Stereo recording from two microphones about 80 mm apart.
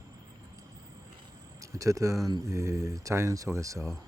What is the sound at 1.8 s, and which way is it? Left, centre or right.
Speech, right.